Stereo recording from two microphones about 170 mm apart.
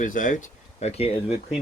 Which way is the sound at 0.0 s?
50° left (ahead or behind).